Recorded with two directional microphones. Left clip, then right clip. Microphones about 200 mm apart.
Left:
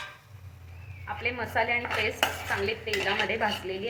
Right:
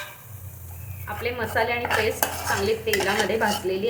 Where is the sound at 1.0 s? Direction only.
10° right (ahead or behind).